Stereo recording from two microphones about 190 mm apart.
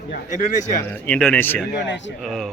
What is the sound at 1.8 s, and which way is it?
Speech, 70° left (ahead or behind).